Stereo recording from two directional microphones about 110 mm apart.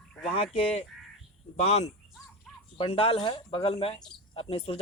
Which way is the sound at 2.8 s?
60° left (ahead or behind).